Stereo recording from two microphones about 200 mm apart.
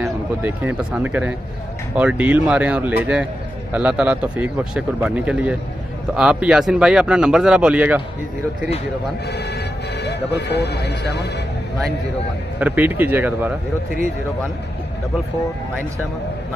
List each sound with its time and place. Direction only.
0.0 s speech: 10° right (ahead or behind)
9.3 s speech: 55° left (ahead or behind)
12.5 s speech: 10° right (ahead or behind)